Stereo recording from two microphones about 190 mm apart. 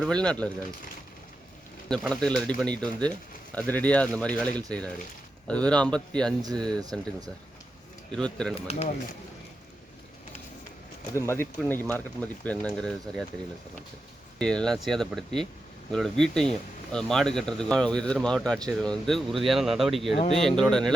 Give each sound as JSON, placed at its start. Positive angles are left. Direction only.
{"t": 0.0, "sound": "speech", "side_deg": 5}
{"t": 1.9, "sound": "speech", "side_deg": 5}
{"t": 8.1, "sound": "speech", "side_deg": 5}
{"t": 8.5, "sound": "speech", "side_deg": 35}
{"t": 11.1, "sound": "speech", "side_deg": 15}
{"t": 14.3, "sound": "speech", "side_deg": 5}